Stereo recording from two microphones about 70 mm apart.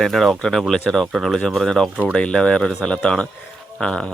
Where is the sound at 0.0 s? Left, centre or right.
Centre.